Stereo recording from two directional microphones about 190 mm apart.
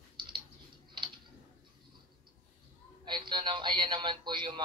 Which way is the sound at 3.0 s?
25° right (ahead or behind).